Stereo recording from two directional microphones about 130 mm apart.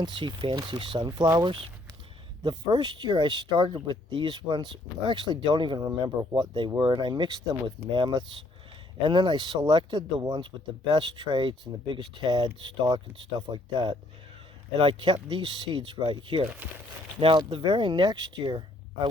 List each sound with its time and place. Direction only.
0.0 s speech: 35° right (ahead or behind)